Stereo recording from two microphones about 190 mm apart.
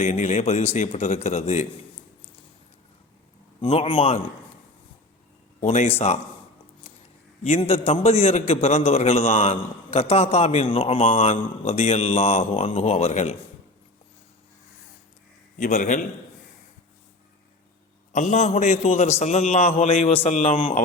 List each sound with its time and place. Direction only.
0.0 s a man's voice: 35° left (ahead or behind)
3.6 s a man's voice: 30° left (ahead or behind)
5.5 s a man's voice: 35° left (ahead or behind)
7.4 s a man's voice: 30° left (ahead or behind)
15.5 s a man's voice: 40° left (ahead or behind)
18.1 s a man's voice: 40° left (ahead or behind)